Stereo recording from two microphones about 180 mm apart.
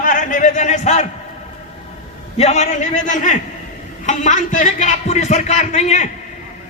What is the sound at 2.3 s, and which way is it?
A man's voice, 40° left (ahead or behind).